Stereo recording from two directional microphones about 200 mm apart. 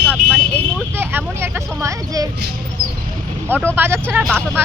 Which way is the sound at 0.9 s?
10° right (ahead or behind).